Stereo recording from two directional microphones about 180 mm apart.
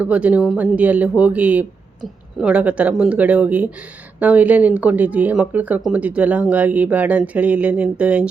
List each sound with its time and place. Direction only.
0.0 s speech: 5° right (ahead or behind)